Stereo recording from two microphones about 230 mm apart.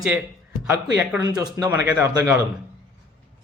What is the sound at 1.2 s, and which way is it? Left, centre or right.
Speech, centre.